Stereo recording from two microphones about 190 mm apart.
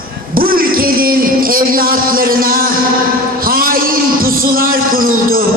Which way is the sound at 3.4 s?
50° right (ahead or behind).